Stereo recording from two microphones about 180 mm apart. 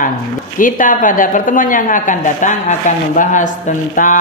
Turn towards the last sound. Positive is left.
turn(degrees=45)  # may be behind; listen again after turning